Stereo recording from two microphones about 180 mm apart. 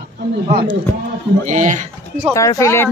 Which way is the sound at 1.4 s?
45° right (ahead or behind).